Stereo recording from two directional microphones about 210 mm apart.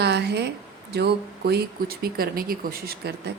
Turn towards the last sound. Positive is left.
turn(degrees=-45)  # may be behind; listen again after turning